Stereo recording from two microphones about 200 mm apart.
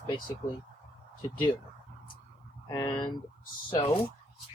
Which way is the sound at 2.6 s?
20° left (ahead or behind).